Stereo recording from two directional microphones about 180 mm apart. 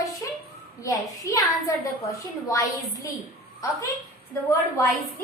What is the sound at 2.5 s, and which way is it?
A child's voice, 20° left (ahead or behind).